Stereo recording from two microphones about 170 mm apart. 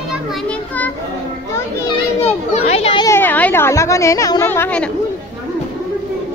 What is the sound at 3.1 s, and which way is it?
Speech, 10° left (ahead or behind).